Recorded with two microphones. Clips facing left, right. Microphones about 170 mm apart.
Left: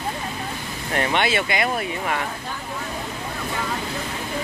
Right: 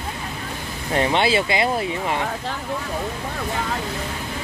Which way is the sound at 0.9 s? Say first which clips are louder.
Right 3 dB; 25° right (ahead or behind).